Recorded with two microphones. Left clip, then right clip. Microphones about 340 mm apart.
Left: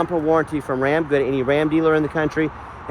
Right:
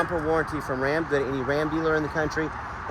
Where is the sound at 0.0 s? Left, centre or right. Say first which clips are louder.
Left 6 dB; left.